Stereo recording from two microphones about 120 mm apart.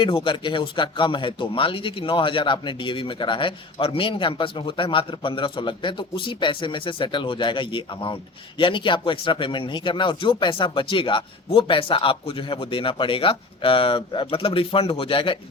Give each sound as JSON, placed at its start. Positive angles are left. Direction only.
{"t": 0.0, "sound": "speech", "side_deg": 45}